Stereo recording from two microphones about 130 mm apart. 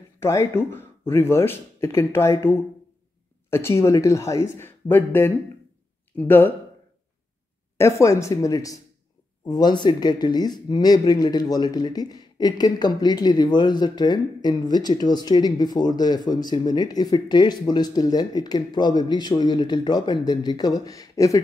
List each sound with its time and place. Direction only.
0.2 s speech: 20° left (ahead or behind)
7.7 s speech: 20° left (ahead or behind)